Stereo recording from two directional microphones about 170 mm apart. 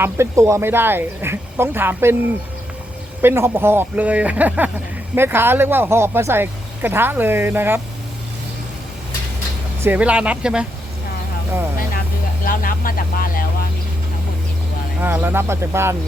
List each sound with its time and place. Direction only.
0.0 s speech: 15° right (ahead or behind)
3.2 s speech: 15° right (ahead or behind)
9.8 s speech: 10° right (ahead or behind)
12.5 s speech: 55° left (ahead or behind)
15.0 s speech: 10° right (ahead or behind)